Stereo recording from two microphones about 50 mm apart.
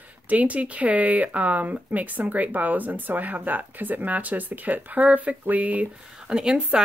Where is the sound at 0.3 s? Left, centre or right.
Right.